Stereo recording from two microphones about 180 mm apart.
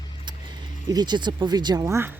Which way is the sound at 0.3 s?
25° right (ahead or behind).